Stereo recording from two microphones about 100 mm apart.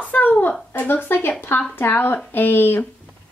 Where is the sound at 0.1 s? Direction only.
15° left (ahead or behind).